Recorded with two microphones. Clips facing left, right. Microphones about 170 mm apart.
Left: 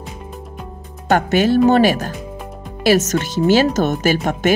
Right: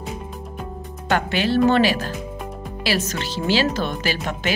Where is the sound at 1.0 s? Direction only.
45° left (ahead or behind).